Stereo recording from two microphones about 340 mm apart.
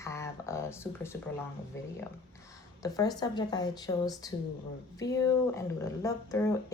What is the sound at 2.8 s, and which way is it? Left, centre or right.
Speech, centre.